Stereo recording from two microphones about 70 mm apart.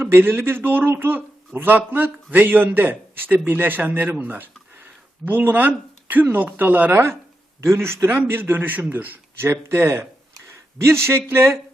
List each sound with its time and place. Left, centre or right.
0.0 s a man's voice: right
7.6 s a man's voice: right